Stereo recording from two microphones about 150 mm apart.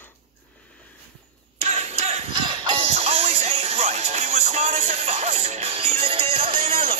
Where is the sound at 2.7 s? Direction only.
45° right (ahead or behind).